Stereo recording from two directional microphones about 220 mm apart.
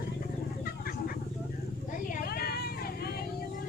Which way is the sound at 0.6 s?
40° left (ahead or behind).